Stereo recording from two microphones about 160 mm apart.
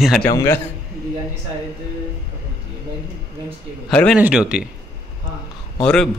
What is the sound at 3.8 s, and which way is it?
Speech, 5° left (ahead or behind).